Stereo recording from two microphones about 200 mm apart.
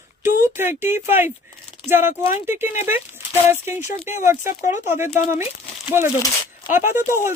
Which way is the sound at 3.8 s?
35° left (ahead or behind).